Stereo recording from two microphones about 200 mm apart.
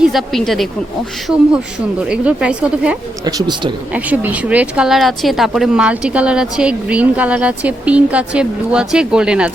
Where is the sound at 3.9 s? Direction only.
10° right (ahead or behind).